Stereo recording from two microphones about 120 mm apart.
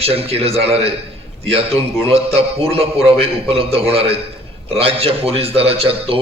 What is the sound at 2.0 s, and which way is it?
A man's voice, 55° right (ahead or behind).